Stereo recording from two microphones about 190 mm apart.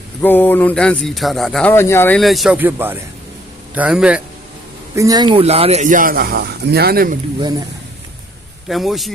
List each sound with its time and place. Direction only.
0.2 s a man's voice: 10° left (ahead or behind); by 4.2 s 5° right (ahead or behind)
4.9 s speech: 20° right (ahead or behind); by 7.2 s 50° right (ahead or behind)
8.7 s speech: centre (ahead or behind)